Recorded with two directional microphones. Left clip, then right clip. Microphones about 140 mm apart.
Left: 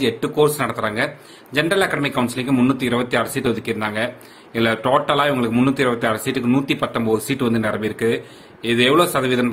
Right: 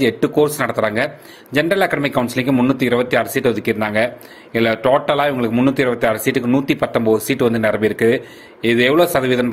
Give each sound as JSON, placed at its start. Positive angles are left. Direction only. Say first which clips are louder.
{"t": 0.0, "sound": "a man's voice", "louder": "right 2 dB", "side_deg": -45}